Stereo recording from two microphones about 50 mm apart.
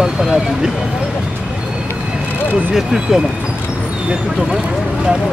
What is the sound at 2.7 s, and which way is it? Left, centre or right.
Speech, centre.